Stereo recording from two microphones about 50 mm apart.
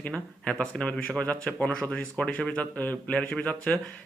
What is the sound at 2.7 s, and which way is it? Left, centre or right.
Speech, left.